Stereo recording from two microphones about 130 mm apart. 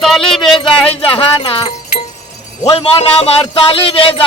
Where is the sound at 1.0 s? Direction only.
45° left (ahead or behind).